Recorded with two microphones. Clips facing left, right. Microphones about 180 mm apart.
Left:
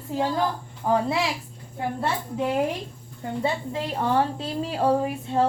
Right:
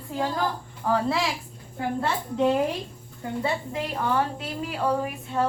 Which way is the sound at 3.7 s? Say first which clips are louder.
Left 2 dB; 30° left (ahead or behind).